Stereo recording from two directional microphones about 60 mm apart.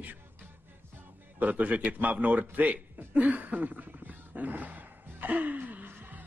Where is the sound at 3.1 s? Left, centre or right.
Right.